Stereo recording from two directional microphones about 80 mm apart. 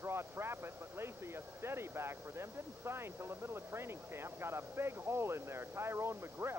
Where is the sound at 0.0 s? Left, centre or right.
Right.